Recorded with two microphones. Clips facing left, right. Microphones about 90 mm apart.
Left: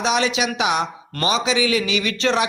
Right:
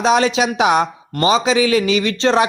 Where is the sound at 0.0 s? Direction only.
40° right (ahead or behind).